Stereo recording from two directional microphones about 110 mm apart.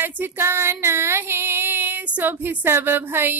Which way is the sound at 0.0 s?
20° right (ahead or behind).